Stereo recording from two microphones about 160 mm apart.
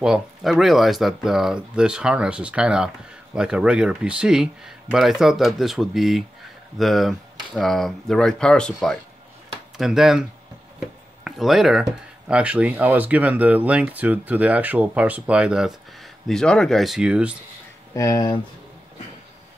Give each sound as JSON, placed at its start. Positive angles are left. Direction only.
{"t": 0.0, "sound": "speech", "side_deg": -5}
{"t": 11.2, "sound": "speech", "side_deg": 0}
{"t": 17.9, "sound": "speech", "side_deg": 20}